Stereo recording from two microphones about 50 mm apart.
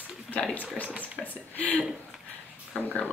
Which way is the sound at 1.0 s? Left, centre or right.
Left.